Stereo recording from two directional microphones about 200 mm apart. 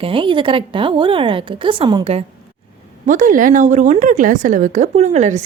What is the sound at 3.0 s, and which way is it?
Speech, 40° right (ahead or behind).